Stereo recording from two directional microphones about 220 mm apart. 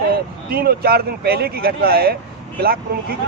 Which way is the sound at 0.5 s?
45° right (ahead or behind).